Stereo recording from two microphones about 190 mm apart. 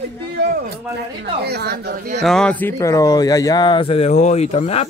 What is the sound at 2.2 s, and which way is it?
Speech, 5° left (ahead or behind).